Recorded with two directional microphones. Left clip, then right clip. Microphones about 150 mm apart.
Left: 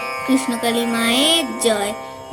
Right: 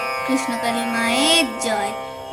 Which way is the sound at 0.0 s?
Centre (ahead or behind).